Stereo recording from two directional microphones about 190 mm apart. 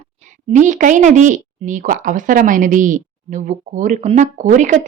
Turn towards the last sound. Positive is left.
turn(degrees=-40)  # may be behind; listen again after turning